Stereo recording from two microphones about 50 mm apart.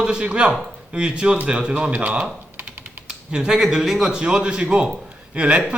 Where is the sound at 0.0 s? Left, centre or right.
Centre.